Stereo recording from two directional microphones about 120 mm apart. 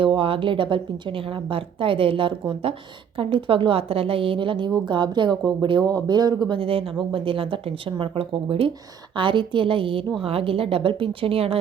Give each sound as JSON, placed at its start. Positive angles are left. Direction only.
{"t": 0.0, "sound": "a woman's voice", "side_deg": -50}